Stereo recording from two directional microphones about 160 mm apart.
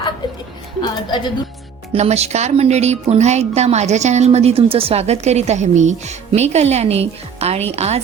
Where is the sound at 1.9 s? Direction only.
40° right (ahead or behind).